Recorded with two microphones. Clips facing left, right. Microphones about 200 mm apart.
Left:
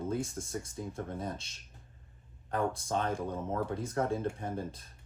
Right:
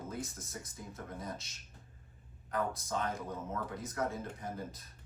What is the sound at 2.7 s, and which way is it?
Speech, 30° left (ahead or behind).